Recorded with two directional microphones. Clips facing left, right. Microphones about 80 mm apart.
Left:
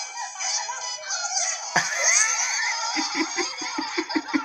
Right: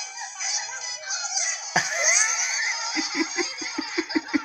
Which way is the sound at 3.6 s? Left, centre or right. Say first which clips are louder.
Left 2 dB; left.